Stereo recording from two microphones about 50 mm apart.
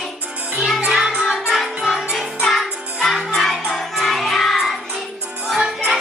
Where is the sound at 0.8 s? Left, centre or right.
Centre.